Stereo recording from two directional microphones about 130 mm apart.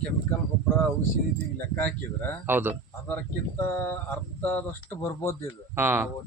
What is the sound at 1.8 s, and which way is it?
Speech, 15° left (ahead or behind).